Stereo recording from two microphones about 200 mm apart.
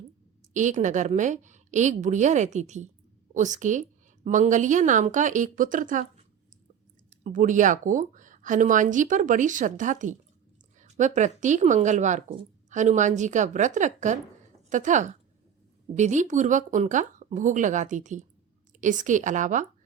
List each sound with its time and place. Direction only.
0.5 s a woman's voice: 40° right (ahead or behind)
7.1 s a woman's voice: 40° right (ahead or behind)